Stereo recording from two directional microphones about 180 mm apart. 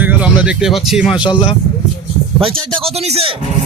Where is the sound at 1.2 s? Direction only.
25° left (ahead or behind).